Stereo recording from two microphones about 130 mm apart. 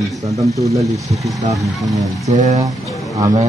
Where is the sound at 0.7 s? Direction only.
25° right (ahead or behind).